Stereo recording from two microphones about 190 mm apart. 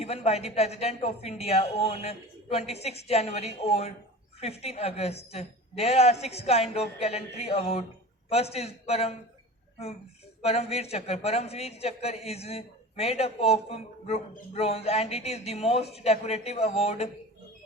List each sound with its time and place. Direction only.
0.0 s a man's voice: 35° left (ahead or behind)
10.4 s a man's voice: 30° left (ahead or behind)